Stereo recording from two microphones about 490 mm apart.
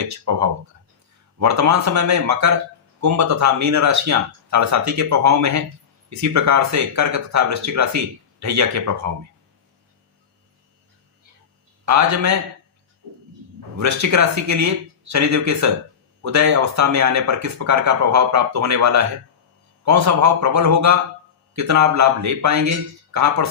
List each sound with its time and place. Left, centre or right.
0.0 s speech: right
11.9 s speech: right
13.7 s speech: right